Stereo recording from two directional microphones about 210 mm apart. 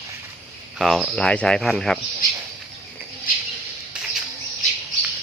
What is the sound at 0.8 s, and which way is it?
Speech, centre (ahead or behind).